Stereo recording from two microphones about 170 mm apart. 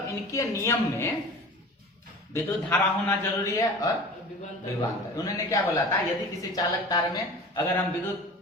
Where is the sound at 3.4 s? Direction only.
20° left (ahead or behind).